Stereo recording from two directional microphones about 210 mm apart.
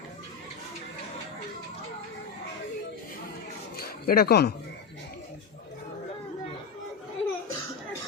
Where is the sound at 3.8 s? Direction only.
45° left (ahead or behind).